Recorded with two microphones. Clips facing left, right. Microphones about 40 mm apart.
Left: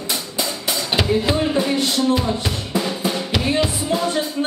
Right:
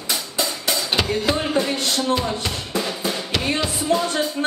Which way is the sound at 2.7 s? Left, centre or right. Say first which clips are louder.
Left 3 dB; centre.